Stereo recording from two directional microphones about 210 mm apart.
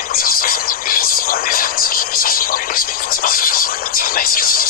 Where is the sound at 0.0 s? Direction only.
45° left (ahead or behind).